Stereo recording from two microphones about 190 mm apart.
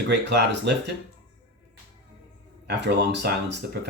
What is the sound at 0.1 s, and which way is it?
Speech, 65° right (ahead or behind).